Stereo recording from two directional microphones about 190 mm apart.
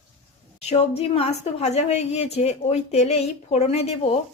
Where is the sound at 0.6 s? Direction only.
35° left (ahead or behind).